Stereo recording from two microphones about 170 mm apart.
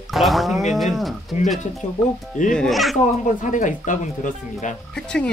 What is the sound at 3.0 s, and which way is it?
Speech, 45° left (ahead or behind).